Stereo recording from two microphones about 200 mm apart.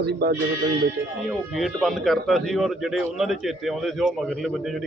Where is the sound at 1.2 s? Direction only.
Centre (ahead or behind).